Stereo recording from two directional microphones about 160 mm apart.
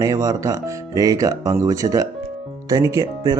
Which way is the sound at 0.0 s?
20° right (ahead or behind).